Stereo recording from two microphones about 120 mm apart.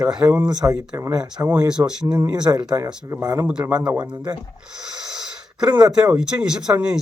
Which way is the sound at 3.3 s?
15° right (ahead or behind).